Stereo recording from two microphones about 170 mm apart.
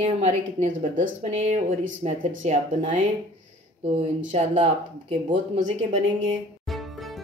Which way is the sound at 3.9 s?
40° right (ahead or behind).